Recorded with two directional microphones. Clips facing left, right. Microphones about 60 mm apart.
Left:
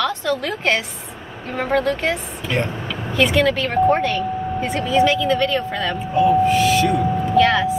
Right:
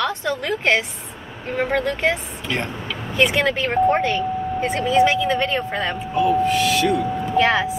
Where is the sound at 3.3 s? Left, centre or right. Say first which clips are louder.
Left 2 dB; centre.